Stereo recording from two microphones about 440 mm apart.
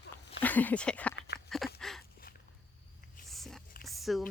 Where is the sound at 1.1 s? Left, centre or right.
Left.